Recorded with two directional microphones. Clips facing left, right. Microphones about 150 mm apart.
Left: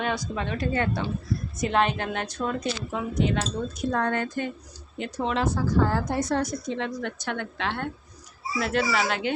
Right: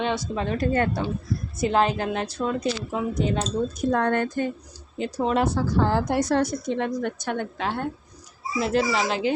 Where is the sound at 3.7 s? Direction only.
50° right (ahead or behind).